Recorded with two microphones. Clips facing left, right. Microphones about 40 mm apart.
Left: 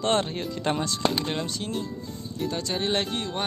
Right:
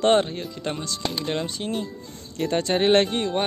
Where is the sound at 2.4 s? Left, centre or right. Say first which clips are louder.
Right 7 dB; right.